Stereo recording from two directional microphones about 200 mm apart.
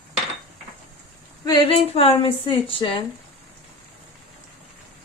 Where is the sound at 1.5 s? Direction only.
25° left (ahead or behind).